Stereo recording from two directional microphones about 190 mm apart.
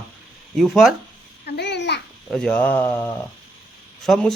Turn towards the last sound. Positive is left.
turn(degrees=0)  # may be behind; listen again after turning